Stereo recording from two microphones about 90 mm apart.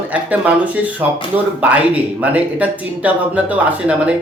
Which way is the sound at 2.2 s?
15° right (ahead or behind).